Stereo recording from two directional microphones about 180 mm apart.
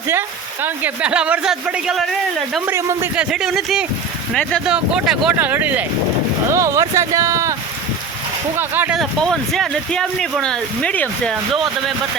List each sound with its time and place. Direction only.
0.1 s speech: 10° right (ahead or behind)
8.5 s speech: 10° right (ahead or behind)